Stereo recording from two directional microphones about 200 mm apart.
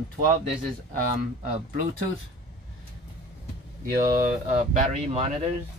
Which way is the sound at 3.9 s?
45° right (ahead or behind).